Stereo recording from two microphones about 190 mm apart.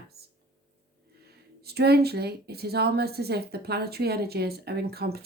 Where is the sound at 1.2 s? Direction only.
60° right (ahead or behind).